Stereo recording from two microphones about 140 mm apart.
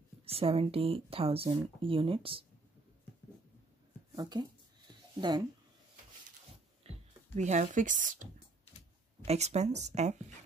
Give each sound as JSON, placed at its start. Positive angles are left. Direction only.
{"t": 0.2, "sound": "speech", "side_deg": -45}
{"t": 4.1, "sound": "speech", "side_deg": -30}
{"t": 6.8, "sound": "a sound", "side_deg": -45}
{"t": 7.3, "sound": "speech", "side_deg": -55}
{"t": 9.2, "sound": "speech", "side_deg": -50}